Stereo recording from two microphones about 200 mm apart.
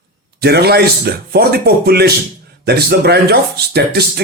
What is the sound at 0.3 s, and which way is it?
Speech, 55° right (ahead or behind).